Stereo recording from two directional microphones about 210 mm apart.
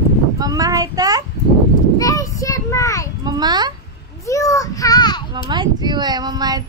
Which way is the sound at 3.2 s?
20° right (ahead or behind).